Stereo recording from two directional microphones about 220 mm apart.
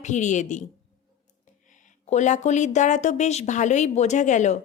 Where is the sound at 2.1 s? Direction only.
35° left (ahead or behind).